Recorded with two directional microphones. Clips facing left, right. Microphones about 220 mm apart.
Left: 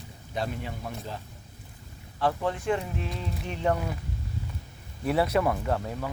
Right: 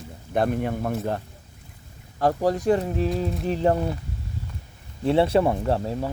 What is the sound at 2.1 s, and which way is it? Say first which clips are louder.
Speech: right 6 dB; 40° right (ahead or behind).